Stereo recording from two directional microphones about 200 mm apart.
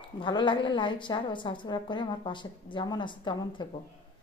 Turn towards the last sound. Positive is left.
turn(degrees=25)  # may be behind; listen again after turning